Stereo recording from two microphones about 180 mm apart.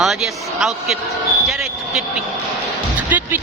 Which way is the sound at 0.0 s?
Centre (ahead or behind).